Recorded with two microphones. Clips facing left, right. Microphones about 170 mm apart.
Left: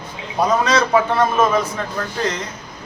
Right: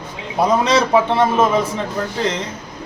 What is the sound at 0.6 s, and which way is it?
Speech, 25° right (ahead or behind).